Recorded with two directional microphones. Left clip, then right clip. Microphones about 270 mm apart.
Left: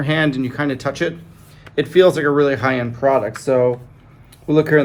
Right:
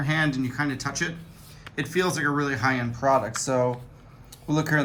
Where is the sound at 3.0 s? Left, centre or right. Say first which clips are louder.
Left 6 dB; centre.